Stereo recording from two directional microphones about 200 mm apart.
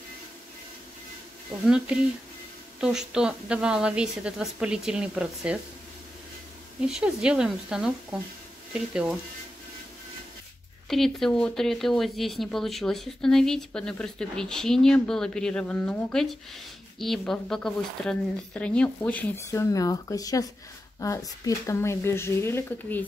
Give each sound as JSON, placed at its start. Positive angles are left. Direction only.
{"t": 2.8, "sound": "speech", "side_deg": -5}
{"t": 6.8, "sound": "speech", "side_deg": -5}
{"t": 10.9, "sound": "speech", "side_deg": 0}